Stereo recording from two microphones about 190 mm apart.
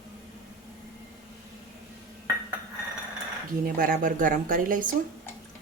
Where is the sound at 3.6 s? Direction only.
50° right (ahead or behind).